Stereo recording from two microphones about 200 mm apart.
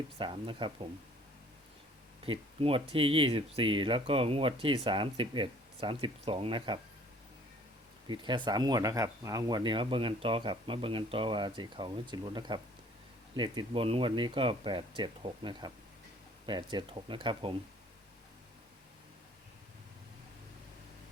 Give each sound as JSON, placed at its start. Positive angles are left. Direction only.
{"t": 0.2, "sound": "speech", "side_deg": -25}
{"t": 2.2, "sound": "speech", "side_deg": -25}
{"t": 8.0, "sound": "speech", "side_deg": -25}